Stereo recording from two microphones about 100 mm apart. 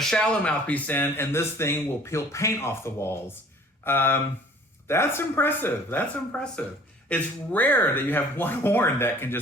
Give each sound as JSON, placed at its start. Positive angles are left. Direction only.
{"t": 0.0, "sound": "speech", "side_deg": 5}